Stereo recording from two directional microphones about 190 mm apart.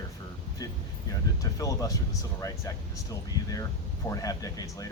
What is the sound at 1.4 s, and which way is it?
Speech, 20° left (ahead or behind).